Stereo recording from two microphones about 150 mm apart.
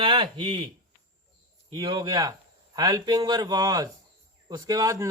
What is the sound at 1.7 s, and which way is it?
A man's voice, 30° right (ahead or behind).